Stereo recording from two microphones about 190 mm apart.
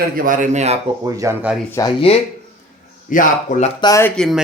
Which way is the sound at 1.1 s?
15° right (ahead or behind).